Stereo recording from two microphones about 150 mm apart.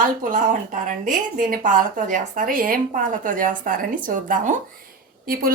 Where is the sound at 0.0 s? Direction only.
60° right (ahead or behind).